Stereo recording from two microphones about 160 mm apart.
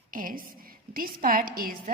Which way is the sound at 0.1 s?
60° right (ahead or behind).